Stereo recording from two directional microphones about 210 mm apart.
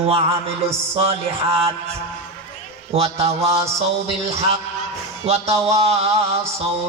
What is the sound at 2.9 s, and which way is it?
A man's voice, 30° right (ahead or behind).